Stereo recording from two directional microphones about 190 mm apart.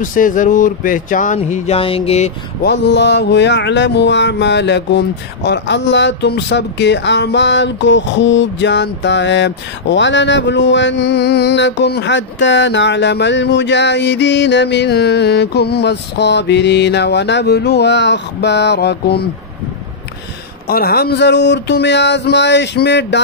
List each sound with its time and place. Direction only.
0.0 s speech: 45° left (ahead or behind)
2.6 s mantra: 65° left (ahead or behind)
20.6 s mantra: 55° left (ahead or behind)